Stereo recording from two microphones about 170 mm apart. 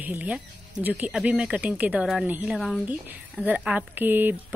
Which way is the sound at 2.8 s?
10° right (ahead or behind).